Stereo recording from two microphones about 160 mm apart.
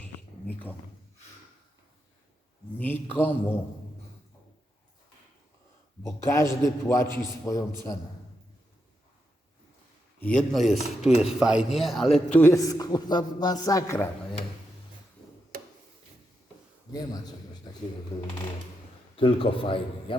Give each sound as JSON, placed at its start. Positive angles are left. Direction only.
{"t": 0.0, "sound": "a sound", "side_deg": 10}
{"t": 2.7, "sound": "speech", "side_deg": 10}
{"t": 6.0, "sound": "a man's voice", "side_deg": 20}
{"t": 10.2, "sound": "a man's voice", "side_deg": 5}
{"t": 12.4, "sound": "a man's voice", "side_deg": 20}
{"t": 16.9, "sound": "a man's voice", "side_deg": 25}
{"t": 18.1, "sound": "a man's voice", "side_deg": 40}